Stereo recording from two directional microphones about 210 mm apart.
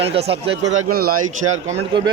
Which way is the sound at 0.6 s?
70° right (ahead or behind).